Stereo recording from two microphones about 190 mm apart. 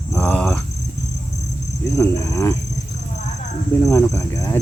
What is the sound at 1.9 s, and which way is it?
Speech, 15° left (ahead or behind).